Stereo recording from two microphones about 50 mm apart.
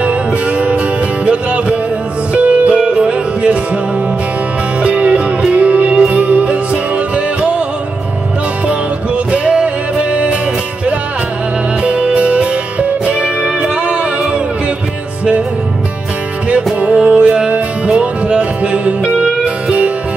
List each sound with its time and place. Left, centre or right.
0.0 s music: right
4.8 s music: right
8.6 s music: right
11.8 s music: right
16.8 s music: right